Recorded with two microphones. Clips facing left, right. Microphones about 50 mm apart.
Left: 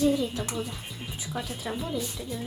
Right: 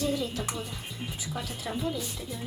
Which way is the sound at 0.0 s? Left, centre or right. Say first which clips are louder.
Left 5 dB; centre.